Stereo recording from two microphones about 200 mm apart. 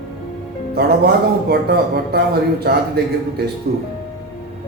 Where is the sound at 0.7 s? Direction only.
55° right (ahead or behind).